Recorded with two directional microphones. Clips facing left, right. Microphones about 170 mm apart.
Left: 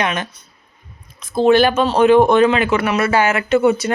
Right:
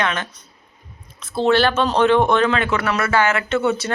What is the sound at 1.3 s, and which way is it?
Speech, 15° left (ahead or behind).